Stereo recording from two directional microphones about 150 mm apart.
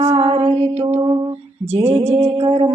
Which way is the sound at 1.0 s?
30° right (ahead or behind).